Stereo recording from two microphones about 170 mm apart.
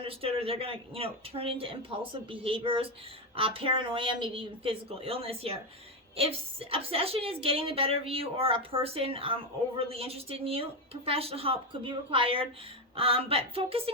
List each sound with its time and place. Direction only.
0.0 s a woman's voice: 35° right (ahead or behind)